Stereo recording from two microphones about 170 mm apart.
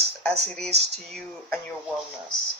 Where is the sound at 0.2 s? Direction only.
5° left (ahead or behind).